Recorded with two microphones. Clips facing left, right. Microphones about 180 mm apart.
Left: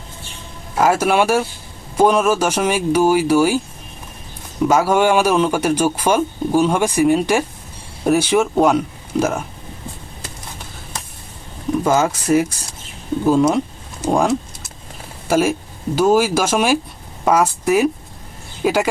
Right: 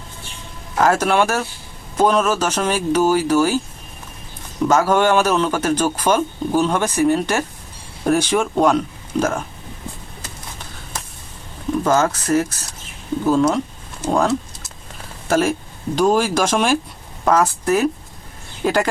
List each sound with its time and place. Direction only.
0.8 s a man's voice: 10° left (ahead or behind)
4.6 s a man's voice: 10° left (ahead or behind)
11.8 s a man's voice: 10° left (ahead or behind)
14.0 s a man's voice: 15° left (ahead or behind)